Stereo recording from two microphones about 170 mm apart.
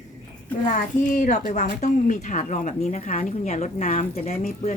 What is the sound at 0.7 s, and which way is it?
A woman's voice, 50° left (ahead or behind).